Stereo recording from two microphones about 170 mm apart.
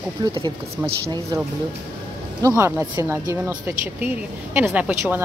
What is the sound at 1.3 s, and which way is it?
Speech, 25° right (ahead or behind).